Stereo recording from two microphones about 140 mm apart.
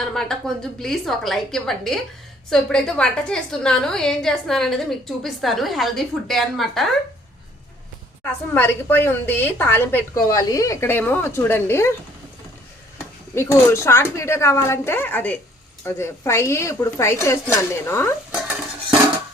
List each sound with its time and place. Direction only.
0.0 s a woman's voice: 5° left (ahead or behind)
8.2 s a woman's voice: 15° left (ahead or behind)
10.2 s a woman's voice: 25° left (ahead or behind)
13.3 s a woman's voice: 20° left (ahead or behind)